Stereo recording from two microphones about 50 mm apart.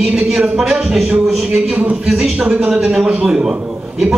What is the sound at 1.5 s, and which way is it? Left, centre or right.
Speech, right.